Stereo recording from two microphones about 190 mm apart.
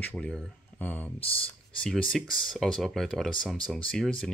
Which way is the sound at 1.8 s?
Centre (ahead or behind).